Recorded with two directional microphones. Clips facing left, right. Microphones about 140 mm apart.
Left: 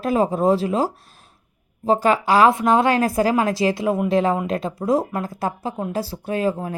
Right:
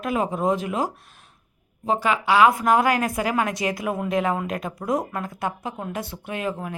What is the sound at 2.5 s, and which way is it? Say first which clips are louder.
A woman's voice: left 2 dB; 25° left (ahead or behind).